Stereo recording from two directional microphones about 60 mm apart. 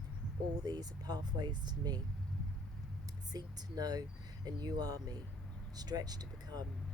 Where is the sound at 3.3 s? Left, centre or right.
Right.